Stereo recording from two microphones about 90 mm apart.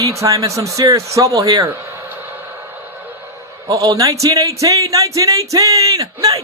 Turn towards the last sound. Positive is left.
turn(degrees=-40)  # may be behind; listen again after turning